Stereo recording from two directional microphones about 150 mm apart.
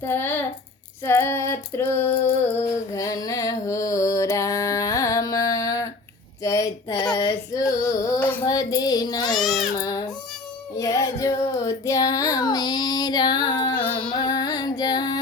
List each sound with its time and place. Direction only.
0.0 s female singing: 15° left (ahead or behind)
2.9 s music: 20° left (ahead or behind)
6.4 s a sound: 20° left (ahead or behind)
7.6 s music: 20° left (ahead or behind)
8.4 s child singing: 25° left (ahead or behind)
9.7 s baby cry: 25° left (ahead or behind)
10.8 s child singing: 20° left (ahead or behind)
13.9 s music: 30° left (ahead or behind)